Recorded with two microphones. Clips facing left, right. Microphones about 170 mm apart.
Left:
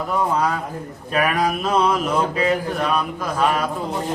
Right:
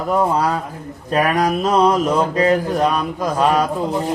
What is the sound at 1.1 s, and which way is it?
Speech, 40° right (ahead or behind).